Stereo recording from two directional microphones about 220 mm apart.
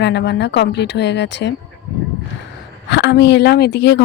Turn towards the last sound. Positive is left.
turn(degrees=50)  # may be behind; listen again after turning